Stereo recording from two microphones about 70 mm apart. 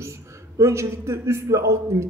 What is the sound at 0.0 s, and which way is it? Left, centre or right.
A man's voice, right.